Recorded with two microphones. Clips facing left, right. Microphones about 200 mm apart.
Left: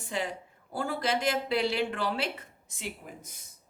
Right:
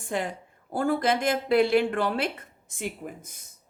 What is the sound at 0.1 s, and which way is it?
A woman's voice, 55° right (ahead or behind).